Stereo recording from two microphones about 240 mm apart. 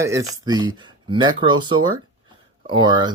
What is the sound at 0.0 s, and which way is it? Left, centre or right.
Speech, centre.